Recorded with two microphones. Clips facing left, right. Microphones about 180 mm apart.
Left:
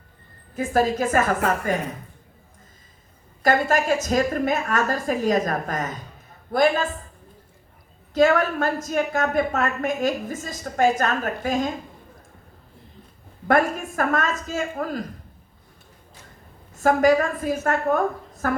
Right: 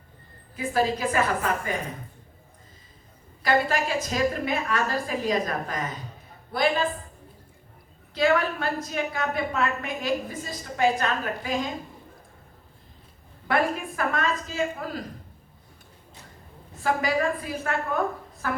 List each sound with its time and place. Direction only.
0.5 s a woman's voice: 45° left (ahead or behind)
3.4 s a woman's voice: 45° left (ahead or behind)
8.1 s a woman's voice: 45° left (ahead or behind)
13.5 s a woman's voice: 45° left (ahead or behind)
16.8 s a woman's voice: 45° left (ahead or behind)